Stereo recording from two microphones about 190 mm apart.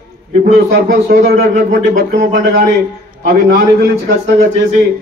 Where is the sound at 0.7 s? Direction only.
65° right (ahead or behind).